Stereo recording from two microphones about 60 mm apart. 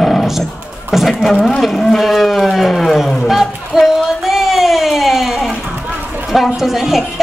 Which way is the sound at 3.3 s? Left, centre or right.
Centre.